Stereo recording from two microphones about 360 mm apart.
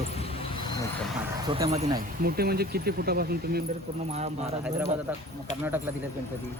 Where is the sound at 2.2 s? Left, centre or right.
Right.